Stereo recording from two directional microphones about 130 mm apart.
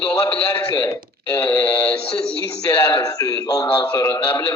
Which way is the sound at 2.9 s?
25° left (ahead or behind).